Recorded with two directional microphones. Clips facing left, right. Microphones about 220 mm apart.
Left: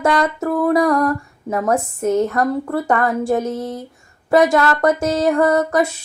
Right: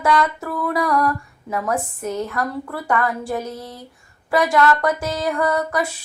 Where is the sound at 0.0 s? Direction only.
45° left (ahead or behind).